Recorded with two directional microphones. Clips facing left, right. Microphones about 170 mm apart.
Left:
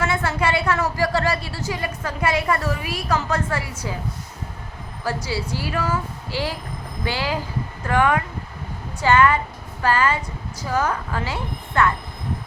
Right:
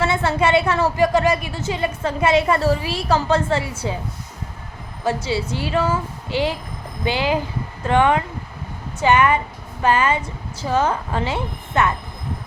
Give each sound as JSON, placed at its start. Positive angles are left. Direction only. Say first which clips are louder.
{"t": 0.0, "sound": "a woman's voice", "louder": "right 3 dB", "side_deg": -25}
{"t": 5.0, "sound": "a woman's voice", "louder": "right 4 dB", "side_deg": -25}